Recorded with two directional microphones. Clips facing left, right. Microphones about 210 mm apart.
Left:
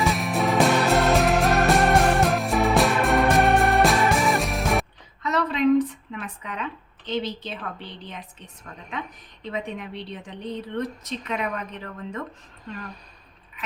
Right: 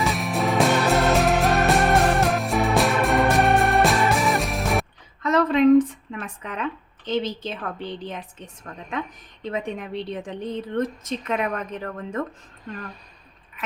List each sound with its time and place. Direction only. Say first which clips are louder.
0.0 s music: even; centre (ahead or behind)
5.2 s a sound: right 5 dB; 45° right (ahead or behind)
9.4 s a woman's voice: right 3 dB; 45° right (ahead or behind)